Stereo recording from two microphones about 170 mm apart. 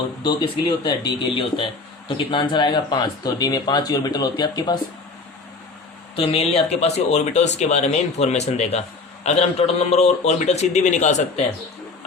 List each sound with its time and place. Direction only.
0.2 s speech: 25° left (ahead or behind)
6.1 s a man's voice: 35° left (ahead or behind)